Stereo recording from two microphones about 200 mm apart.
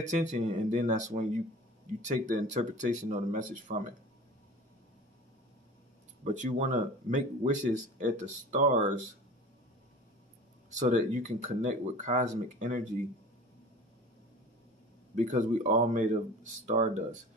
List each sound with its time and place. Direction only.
0.0 s speech: 35° right (ahead or behind)
6.2 s speech: 40° right (ahead or behind)
10.8 s speech: 40° right (ahead or behind)
15.1 s speech: 35° right (ahead or behind)